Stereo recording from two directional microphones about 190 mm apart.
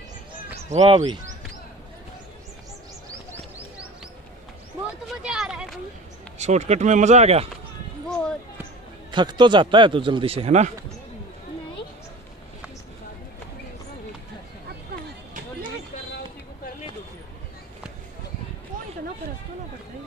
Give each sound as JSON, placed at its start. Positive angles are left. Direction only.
{"t": 0.7, "sound": "speech", "side_deg": -35}
{"t": 5.0, "sound": "a sound", "side_deg": -5}
{"t": 6.3, "sound": "speech", "side_deg": -35}
{"t": 8.1, "sound": "basketball bounce", "side_deg": 5}
{"t": 9.1, "sound": "a man's voice", "side_deg": -25}